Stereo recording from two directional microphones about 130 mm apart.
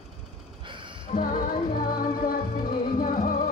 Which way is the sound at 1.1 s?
90° left.